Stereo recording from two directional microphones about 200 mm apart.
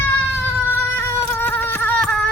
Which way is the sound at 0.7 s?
10° left (ahead or behind).